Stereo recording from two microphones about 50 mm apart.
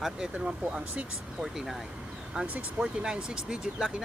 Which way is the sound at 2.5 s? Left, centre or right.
Right.